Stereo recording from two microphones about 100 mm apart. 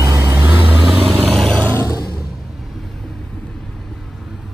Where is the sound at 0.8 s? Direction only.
5° right (ahead or behind).